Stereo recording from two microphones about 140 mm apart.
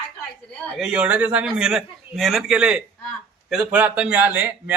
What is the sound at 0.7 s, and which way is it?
A man's voice, 5° right (ahead or behind).